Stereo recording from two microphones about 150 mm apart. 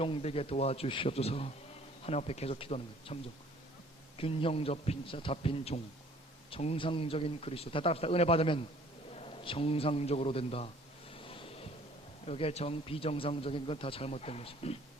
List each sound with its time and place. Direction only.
0.0 s a man's voice: 40° left (ahead or behind)
4.2 s a man's voice: 40° left (ahead or behind)
11.1 s a sound: 35° left (ahead or behind)
12.2 s a man's voice: 45° left (ahead or behind)